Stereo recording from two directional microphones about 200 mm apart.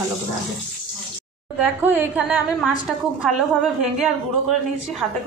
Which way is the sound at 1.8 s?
10° right (ahead or behind).